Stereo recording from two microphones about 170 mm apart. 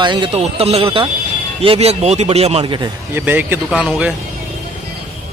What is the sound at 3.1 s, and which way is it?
Speech, 10° right (ahead or behind).